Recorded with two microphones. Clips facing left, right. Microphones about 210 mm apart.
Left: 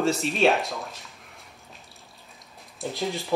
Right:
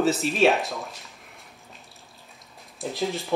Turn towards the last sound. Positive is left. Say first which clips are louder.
# right 1 dB
turn(degrees=0)  # may be behind; listen again after turning